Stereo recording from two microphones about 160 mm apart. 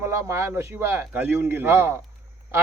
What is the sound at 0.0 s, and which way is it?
A man's voice, 20° right (ahead or behind).